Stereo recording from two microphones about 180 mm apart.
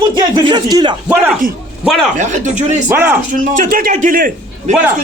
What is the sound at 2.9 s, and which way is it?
Speech, 10° right (ahead or behind).